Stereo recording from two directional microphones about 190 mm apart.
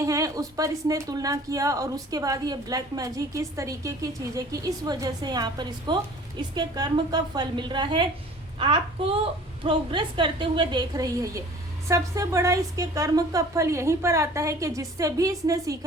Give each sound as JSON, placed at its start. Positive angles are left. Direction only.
{"t": 0.0, "sound": "a woman's voice", "side_deg": -15}